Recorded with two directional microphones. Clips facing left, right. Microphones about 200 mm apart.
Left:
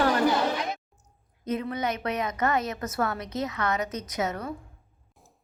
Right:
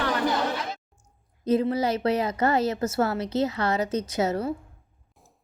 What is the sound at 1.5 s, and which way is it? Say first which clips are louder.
A woman's voice: right 6 dB; 30° right (ahead or behind).